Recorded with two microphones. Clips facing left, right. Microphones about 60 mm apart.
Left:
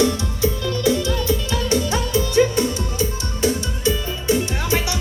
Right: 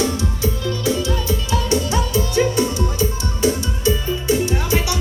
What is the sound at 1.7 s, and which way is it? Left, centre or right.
Music, left.